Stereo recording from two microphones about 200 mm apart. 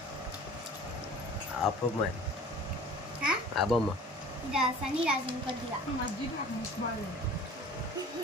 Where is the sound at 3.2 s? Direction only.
5° right (ahead or behind).